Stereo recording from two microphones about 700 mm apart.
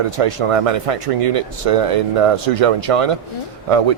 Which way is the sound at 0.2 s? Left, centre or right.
Right.